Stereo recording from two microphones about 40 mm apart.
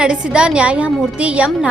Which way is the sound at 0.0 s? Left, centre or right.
Right.